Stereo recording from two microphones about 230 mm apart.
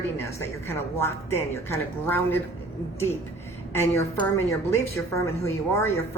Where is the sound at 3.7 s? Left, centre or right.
Centre.